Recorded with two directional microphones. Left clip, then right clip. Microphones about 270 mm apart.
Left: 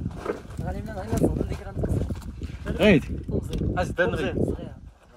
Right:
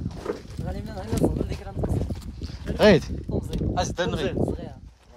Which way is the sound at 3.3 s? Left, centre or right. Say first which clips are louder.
Even; right.